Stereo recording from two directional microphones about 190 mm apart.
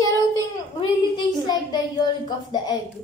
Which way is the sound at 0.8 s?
25° left (ahead or behind).